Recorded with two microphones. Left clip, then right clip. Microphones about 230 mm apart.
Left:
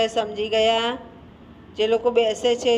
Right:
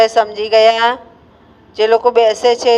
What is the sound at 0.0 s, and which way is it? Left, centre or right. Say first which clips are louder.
A man's voice: right 11 dB; right.